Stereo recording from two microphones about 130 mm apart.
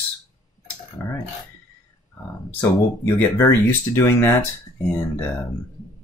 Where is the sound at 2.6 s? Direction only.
15° left (ahead or behind).